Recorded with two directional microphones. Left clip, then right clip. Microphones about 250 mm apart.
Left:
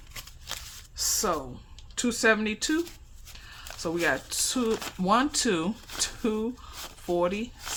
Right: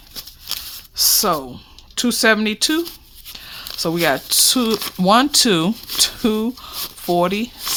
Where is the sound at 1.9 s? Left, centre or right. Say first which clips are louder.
Right 8 dB; right.